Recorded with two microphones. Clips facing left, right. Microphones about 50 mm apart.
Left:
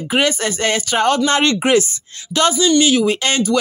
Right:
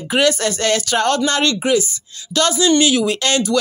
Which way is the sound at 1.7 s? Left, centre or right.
Left.